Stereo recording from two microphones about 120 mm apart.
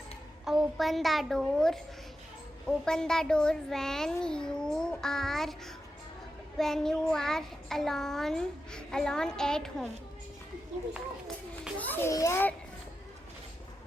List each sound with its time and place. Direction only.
0.4 s a child's voice: centre (ahead or behind)
2.6 s child singing: 5° left (ahead or behind)
11.8 s a child's voice: 15° left (ahead or behind)